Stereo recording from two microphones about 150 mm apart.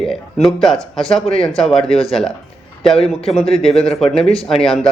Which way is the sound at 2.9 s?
40° left (ahead or behind).